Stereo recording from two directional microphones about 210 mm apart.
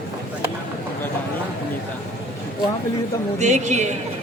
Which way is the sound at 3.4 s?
35° right (ahead or behind).